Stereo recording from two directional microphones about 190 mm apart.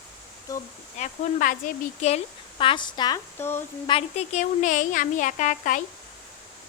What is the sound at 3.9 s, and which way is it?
A woman's voice, 35° left (ahead or behind).